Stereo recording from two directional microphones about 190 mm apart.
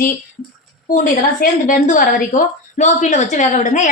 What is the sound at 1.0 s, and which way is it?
A woman's voice, 45° left (ahead or behind).